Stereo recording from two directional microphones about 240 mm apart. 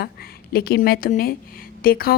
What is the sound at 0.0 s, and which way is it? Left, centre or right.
A woman's voice, left.